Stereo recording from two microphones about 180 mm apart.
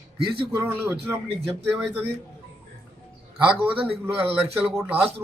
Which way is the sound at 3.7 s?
35° right (ahead or behind).